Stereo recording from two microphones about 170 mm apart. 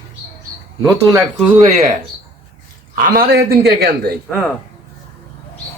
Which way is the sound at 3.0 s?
60° right (ahead or behind).